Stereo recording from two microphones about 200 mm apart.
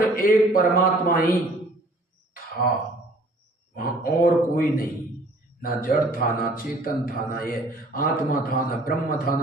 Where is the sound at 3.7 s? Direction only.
45° left (ahead or behind).